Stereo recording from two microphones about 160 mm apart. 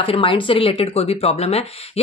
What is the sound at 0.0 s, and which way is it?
Speech, 35° left (ahead or behind).